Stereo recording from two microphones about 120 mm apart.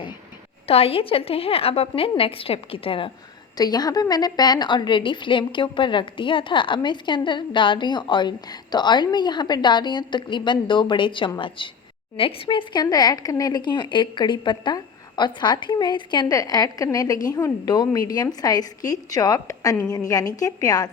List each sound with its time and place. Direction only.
0.7 s a woman's voice: 55° left (ahead or behind)
3.6 s a woman's voice: 35° left (ahead or behind)